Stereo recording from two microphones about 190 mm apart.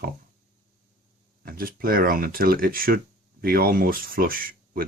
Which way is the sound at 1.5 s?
50° right (ahead or behind).